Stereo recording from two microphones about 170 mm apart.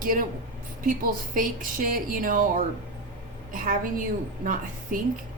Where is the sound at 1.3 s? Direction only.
55° right (ahead or behind).